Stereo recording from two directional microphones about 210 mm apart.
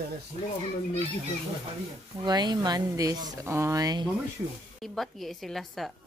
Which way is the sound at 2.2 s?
20° right (ahead or behind).